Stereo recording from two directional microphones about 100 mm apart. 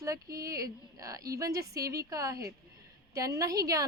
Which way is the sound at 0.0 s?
35° right (ahead or behind).